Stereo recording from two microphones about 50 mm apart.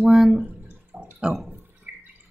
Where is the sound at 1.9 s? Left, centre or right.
Right.